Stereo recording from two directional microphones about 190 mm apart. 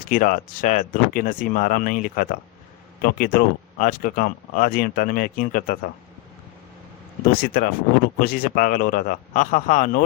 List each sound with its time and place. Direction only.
0.1 s speech: 45° left (ahead or behind)
7.3 s speech: 50° left (ahead or behind)